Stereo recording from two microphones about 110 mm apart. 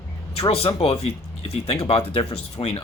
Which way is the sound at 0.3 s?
60° left (ahead or behind).